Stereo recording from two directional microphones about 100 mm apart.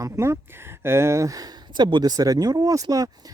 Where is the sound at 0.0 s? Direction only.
30° right (ahead or behind).